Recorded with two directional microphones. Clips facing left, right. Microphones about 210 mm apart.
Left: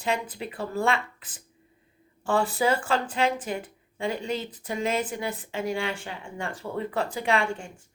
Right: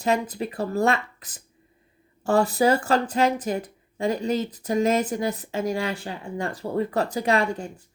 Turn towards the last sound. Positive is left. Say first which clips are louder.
# right 3 dB
turn(degrees=-40)  # may be behind; listen again after turning